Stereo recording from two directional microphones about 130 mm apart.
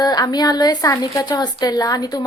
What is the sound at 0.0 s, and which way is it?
A woman's voice, 30° left (ahead or behind).